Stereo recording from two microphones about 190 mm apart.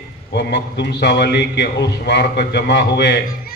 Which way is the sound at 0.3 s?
60° left (ahead or behind).